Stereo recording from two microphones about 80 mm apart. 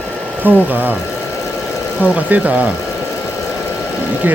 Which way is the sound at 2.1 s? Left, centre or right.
Centre.